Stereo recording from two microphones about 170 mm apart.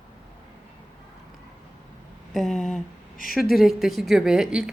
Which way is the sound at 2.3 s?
Centre (ahead or behind).